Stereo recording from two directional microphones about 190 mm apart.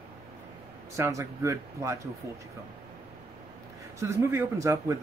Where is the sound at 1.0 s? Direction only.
15° right (ahead or behind).